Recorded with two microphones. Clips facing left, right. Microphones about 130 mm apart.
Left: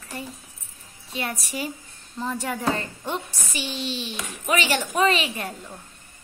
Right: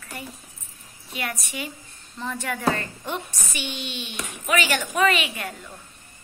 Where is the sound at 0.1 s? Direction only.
30° left (ahead or behind).